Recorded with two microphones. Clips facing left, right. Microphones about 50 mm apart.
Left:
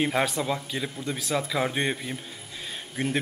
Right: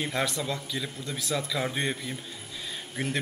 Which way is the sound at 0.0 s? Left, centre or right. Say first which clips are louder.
Left 4 dB; centre.